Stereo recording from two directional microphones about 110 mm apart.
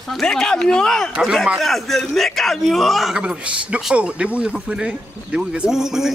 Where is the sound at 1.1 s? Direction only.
5° right (ahead or behind).